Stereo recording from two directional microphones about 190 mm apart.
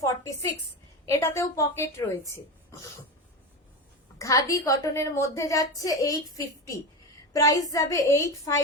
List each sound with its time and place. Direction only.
0.0 s a woman's voice: 20° left (ahead or behind)
4.2 s a woman's voice: 15° left (ahead or behind)